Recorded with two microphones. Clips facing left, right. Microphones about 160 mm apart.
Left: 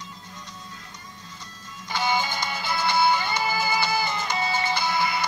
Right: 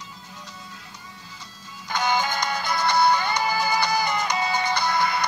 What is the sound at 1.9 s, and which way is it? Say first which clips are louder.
Music: right 2 dB; 5° left (ahead or behind).